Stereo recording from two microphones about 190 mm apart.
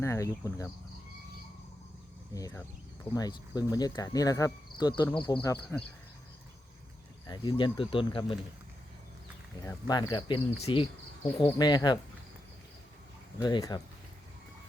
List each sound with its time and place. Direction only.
0.0 s speech: 15° left (ahead or behind)
2.3 s speech: 15° left (ahead or behind)
3.2 s cricket: 20° left (ahead or behind)
7.3 s cricket: 25° left (ahead or behind)
9.6 s cricket: 20° left (ahead or behind)
13.4 s cricket: 20° left (ahead or behind)